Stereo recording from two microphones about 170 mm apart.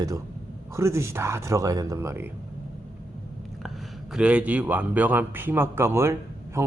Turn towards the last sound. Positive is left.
turn(degrees=-15)  # may be behind; listen again after turning